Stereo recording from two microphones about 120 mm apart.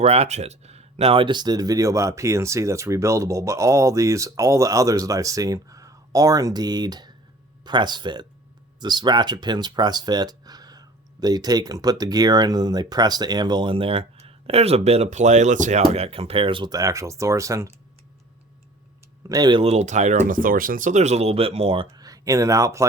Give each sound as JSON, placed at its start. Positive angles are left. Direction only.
{"t": 0.0, "sound": "speech", "side_deg": -60}
{"t": 15.8, "sound": "speech", "side_deg": -55}
{"t": 16.7, "sound": "speech", "side_deg": -25}
{"t": 19.3, "sound": "speech", "side_deg": -35}
{"t": 19.6, "sound": "speech", "side_deg": -75}
{"t": 21.9, "sound": "speech", "side_deg": -30}